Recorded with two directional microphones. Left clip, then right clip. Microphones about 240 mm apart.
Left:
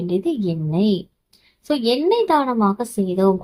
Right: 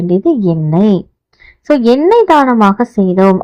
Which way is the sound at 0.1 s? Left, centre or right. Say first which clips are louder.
Right 11 dB; right.